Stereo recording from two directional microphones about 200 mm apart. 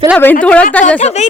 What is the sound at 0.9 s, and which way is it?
Speech, 35° left (ahead or behind).